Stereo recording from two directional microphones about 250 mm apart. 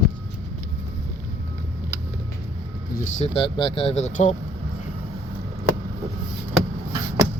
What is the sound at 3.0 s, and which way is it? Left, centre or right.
Speech, left.